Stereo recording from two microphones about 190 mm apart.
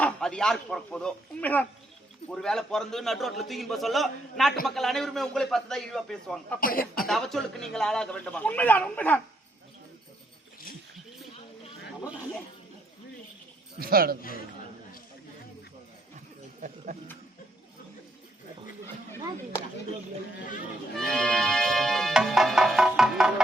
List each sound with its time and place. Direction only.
0.0 s a man's voice: 5° left (ahead or behind)
6.6 s speech: 50° left (ahead or behind)
7.1 s a man's voice: centre (ahead or behind)
13.7 s a man's voice: 50° right (ahead or behind)
14.2 s speech: 50° left (ahead or behind)
16.6 s a sound: 40° right (ahead or behind)
20.9 s music: 5° left (ahead or behind)